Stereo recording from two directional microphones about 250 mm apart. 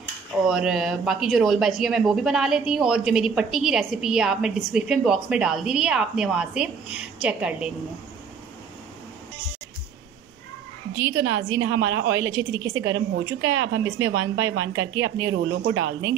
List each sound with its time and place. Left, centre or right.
0.5 s speech: centre
11.0 s a woman's voice: centre
15.3 s speech: right